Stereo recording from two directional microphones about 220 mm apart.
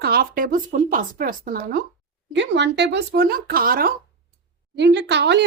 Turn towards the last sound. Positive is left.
turn(degrees=-50)  # may be behind; listen again after turning